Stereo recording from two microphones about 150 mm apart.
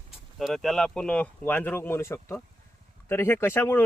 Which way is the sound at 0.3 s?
Centre (ahead or behind).